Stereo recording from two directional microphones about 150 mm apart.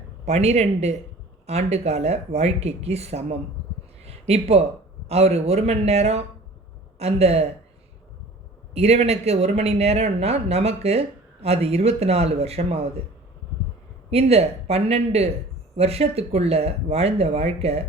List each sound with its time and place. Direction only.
0.3 s speech: 45° right (ahead or behind)
4.0 s a sound: 45° right (ahead or behind)
5.0 s speech: 45° right (ahead or behind)
8.7 s speech: 45° right (ahead or behind)
14.1 s speech: 45° right (ahead or behind)